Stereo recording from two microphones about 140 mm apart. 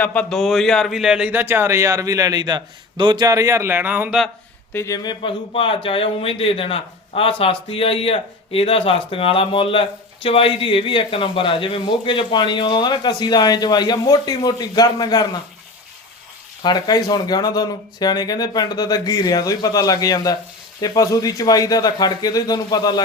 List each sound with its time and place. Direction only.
0.0 s a man's voice: 10° left (ahead or behind); by 4.2 s 10° right (ahead or behind)
4.7 s speech: 20° left (ahead or behind)
16.6 s speech: 30° left (ahead or behind)